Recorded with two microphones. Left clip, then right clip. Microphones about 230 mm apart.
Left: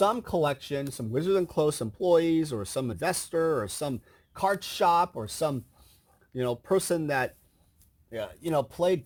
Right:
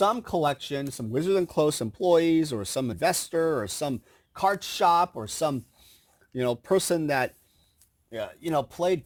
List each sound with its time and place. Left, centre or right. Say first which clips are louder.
0.0 s speech: right 1 dB; right